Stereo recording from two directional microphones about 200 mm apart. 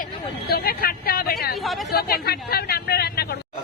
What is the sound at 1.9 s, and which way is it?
Speech, 50° left (ahead or behind).